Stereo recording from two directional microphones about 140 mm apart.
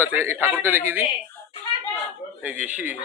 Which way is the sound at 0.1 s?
15° right (ahead or behind).